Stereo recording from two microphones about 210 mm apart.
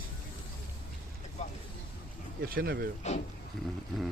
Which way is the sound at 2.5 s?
45° right (ahead or behind).